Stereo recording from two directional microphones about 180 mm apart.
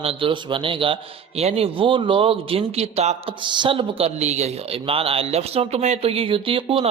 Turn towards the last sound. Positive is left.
turn(degrees=-30)  # may be behind; listen again after turning